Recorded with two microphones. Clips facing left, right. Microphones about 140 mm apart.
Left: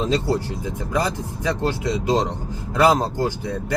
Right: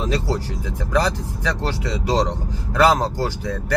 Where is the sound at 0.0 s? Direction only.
20° left (ahead or behind).